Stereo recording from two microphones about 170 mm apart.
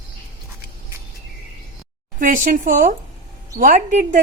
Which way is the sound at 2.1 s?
50° right (ahead or behind).